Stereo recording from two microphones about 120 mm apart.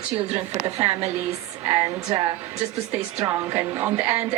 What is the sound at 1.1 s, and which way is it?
Speech, 25° right (ahead or behind).